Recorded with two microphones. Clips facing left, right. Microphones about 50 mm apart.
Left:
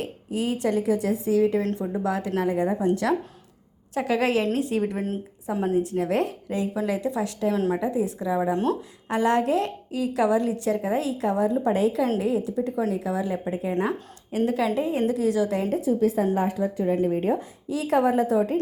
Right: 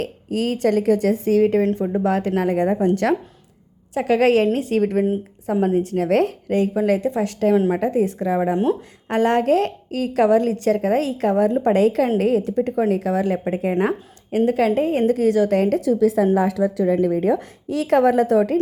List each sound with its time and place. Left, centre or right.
0.0 s a woman's voice: right
3.9 s a woman's voice: right
12.1 s a woman's voice: right
12.9 s a woman's voice: right
13.7 s a woman's voice: right
15.7 s a woman's voice: right